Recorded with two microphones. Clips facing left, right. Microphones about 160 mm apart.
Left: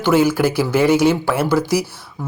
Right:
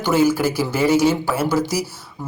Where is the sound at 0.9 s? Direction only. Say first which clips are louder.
Left 2 dB; 10° left (ahead or behind).